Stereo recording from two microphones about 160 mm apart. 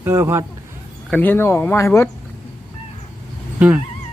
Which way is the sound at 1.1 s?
10° left (ahead or behind).